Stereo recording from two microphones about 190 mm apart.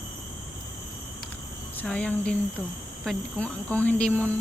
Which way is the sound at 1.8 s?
5° left (ahead or behind).